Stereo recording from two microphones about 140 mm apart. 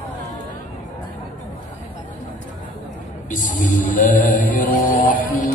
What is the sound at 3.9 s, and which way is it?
Music, 65° left (ahead or behind).